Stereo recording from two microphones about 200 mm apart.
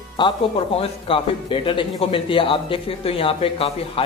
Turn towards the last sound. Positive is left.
turn(degrees=30)  # may be behind; listen again after turning